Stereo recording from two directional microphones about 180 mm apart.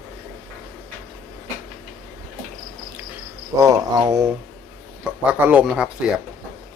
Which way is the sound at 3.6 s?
20° right (ahead or behind).